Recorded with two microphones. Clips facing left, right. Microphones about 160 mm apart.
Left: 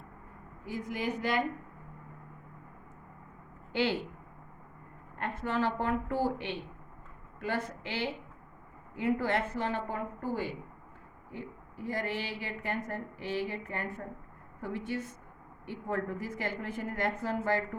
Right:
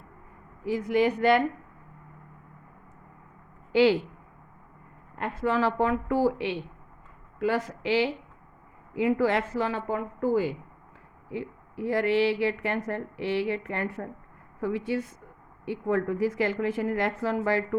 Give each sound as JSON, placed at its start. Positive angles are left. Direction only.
{"t": 0.6, "sound": "speech", "side_deg": -80}
{"t": 3.7, "sound": "speech", "side_deg": -90}
{"t": 5.1, "sound": "a woman's voice", "side_deg": -90}
{"t": 11.3, "sound": "speech", "side_deg": -80}
{"t": 14.6, "sound": "a woman's voice", "side_deg": -90}